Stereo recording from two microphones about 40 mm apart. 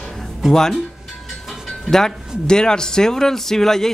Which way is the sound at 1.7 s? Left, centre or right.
Centre.